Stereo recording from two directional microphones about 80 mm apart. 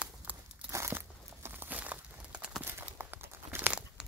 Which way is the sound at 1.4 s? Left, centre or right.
Right.